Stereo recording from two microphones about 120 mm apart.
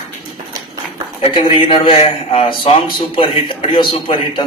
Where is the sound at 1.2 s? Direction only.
50° left (ahead or behind).